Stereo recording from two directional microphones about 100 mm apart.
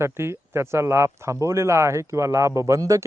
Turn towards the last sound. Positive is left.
turn(degrees=-35)  # may be behind; listen again after turning